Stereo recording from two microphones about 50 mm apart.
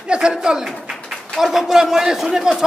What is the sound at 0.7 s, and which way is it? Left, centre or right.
A man's voice, centre.